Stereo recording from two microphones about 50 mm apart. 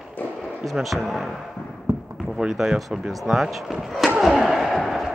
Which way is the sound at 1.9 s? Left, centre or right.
Right.